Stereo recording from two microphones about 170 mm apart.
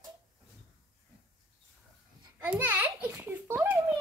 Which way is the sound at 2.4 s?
10° right (ahead or behind).